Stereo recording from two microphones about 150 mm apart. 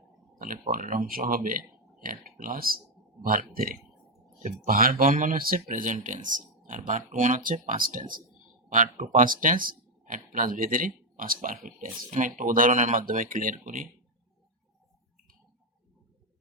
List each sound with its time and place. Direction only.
0.3 s speech: 65° right (ahead or behind)